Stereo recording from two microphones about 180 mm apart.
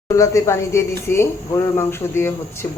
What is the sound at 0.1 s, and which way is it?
Speech, 15° left (ahead or behind).